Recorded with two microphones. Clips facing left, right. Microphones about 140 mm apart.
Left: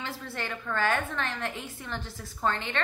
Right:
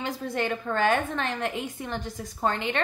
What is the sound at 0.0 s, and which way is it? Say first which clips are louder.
A woman's voice: right 7 dB; 20° right (ahead or behind).